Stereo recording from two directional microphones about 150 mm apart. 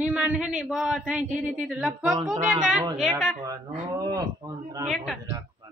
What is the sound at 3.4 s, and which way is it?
Speech, 25° right (ahead or behind).